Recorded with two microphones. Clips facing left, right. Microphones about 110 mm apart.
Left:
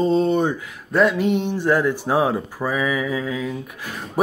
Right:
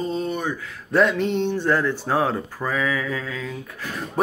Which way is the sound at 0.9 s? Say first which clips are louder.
Left 2 dB; 5° left (ahead or behind).